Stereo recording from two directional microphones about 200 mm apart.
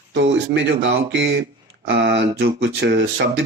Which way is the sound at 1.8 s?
60° right (ahead or behind).